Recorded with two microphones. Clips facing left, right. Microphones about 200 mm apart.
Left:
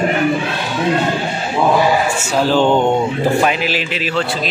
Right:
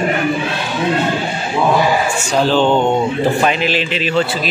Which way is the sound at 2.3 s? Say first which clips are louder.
Even; 10° left (ahead or behind).